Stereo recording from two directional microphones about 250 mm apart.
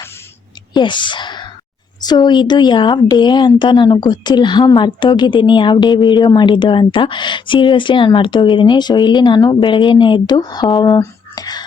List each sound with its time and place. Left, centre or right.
0.8 s speech: centre